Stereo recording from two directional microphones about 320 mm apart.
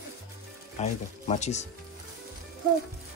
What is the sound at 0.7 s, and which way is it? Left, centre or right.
Speech, left.